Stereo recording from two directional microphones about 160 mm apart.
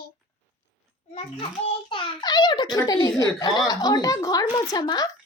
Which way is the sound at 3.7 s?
25° left (ahead or behind).